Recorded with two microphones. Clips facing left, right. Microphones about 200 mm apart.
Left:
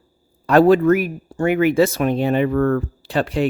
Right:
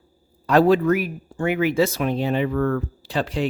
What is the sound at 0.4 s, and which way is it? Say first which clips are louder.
Speech: left 4 dB; 50° left (ahead or behind).